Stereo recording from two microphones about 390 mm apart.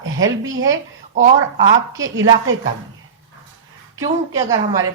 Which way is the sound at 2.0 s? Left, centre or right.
Right.